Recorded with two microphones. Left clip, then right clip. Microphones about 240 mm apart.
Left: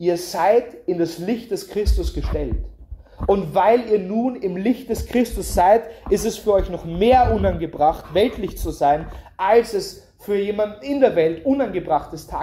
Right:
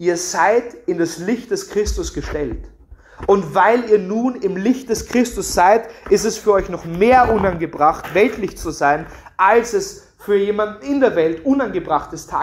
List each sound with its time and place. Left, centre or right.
0.0 s speech: right